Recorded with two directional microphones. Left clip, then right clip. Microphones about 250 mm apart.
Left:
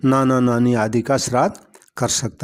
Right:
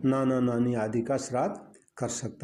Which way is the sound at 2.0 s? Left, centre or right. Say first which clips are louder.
Left 12 dB; left.